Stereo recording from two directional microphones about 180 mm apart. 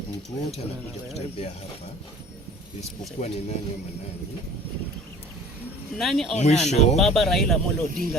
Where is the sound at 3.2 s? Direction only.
40° left (ahead or behind).